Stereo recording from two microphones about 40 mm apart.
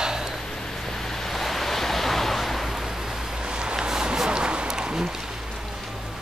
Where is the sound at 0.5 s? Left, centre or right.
Centre.